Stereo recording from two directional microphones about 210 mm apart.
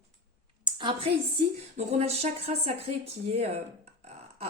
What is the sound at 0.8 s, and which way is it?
Speech, 25° right (ahead or behind).